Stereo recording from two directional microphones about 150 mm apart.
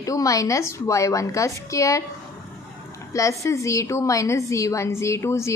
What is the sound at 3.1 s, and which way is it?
A woman's voice, 20° left (ahead or behind).